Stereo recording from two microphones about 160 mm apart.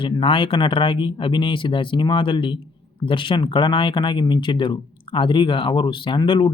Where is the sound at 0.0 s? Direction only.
30° left (ahead or behind).